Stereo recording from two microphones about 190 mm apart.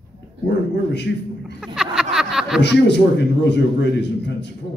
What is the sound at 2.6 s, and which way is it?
Speech, 65° left (ahead or behind).